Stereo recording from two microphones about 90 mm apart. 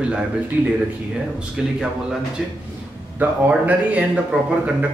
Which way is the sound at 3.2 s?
15° right (ahead or behind).